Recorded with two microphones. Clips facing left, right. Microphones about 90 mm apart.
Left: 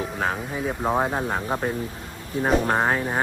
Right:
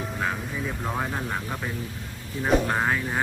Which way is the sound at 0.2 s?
50° left (ahead or behind).